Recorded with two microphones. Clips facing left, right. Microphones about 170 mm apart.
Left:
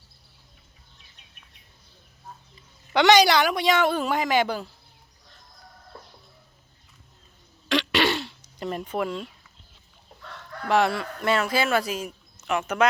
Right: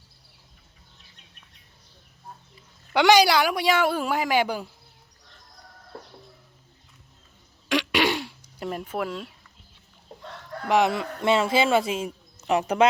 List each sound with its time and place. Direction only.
2.9 s a woman's voice: 10° right (ahead or behind)
7.7 s throat clearing: 10° right (ahead or behind)
10.7 s a man's voice: 15° right (ahead or behind)